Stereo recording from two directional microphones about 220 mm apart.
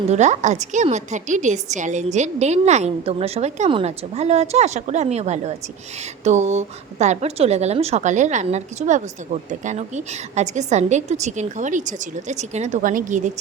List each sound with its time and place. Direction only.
0.1 s a woman's voice: 30° right (ahead or behind)